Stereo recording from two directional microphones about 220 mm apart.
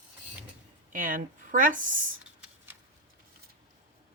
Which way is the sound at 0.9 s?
40° right (ahead or behind).